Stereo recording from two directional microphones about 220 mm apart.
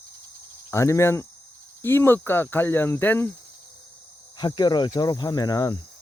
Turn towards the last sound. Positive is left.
turn(degrees=15)  # may be behind; listen again after turning